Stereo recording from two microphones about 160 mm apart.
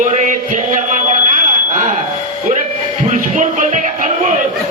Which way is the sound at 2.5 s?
50° right (ahead or behind).